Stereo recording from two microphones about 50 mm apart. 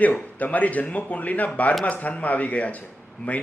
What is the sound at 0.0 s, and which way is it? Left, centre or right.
A man's voice, left.